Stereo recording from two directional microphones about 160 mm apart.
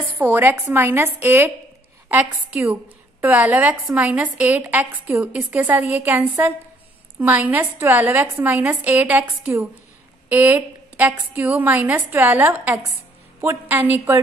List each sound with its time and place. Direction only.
0.2 s a woman's voice: 15° right (ahead or behind)